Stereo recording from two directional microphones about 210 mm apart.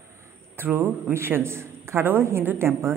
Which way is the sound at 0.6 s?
10° right (ahead or behind).